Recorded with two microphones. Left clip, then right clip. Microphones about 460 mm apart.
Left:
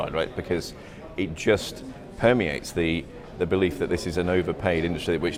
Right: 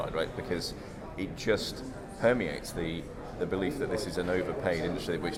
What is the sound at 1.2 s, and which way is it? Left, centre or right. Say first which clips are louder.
Speech: left 7 dB; left.